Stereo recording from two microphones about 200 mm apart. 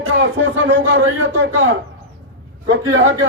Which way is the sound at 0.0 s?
70° right (ahead or behind).